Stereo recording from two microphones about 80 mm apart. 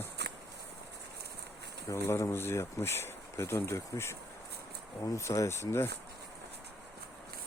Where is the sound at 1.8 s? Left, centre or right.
Left.